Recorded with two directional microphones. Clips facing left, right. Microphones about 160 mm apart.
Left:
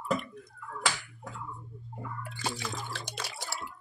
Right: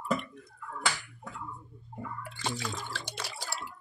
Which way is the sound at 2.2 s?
Centre (ahead or behind).